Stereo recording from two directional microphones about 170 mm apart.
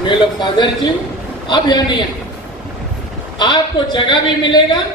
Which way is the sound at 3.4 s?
25° left (ahead or behind).